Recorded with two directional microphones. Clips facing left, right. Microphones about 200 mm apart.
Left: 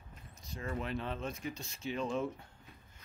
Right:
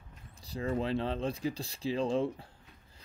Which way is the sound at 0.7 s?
30° right (ahead or behind).